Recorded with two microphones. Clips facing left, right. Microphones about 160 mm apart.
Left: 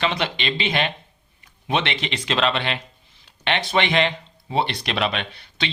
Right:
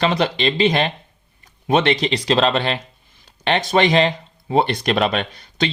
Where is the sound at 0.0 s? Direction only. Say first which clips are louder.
Right 6 dB; 40° right (ahead or behind).